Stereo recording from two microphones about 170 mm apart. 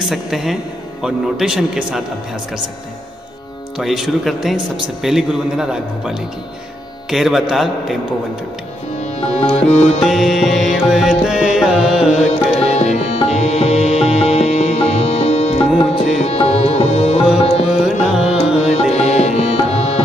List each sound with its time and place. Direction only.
0.0 s a man's voice: centre (ahead or behind)
3.7 s a man's voice: 5° right (ahead or behind)
9.0 s sitar: 40° left (ahead or behind)
10.0 s a man's voice: centre (ahead or behind)
10.9 s music: centre (ahead or behind)
12.2 s music: 40° left (ahead or behind)
17.6 s music: centre (ahead or behind)
18.6 s music: 40° left (ahead or behind)